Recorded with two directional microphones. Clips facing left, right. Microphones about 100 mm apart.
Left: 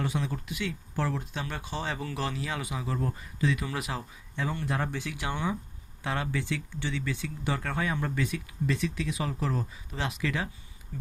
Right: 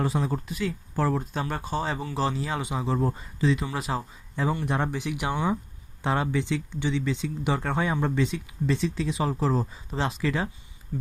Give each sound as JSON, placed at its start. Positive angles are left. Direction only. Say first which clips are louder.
{"t": 0.0, "sound": "speech", "louder": "right 5 dB", "side_deg": -35}